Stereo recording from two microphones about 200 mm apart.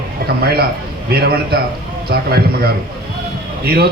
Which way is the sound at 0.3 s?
50° right (ahead or behind).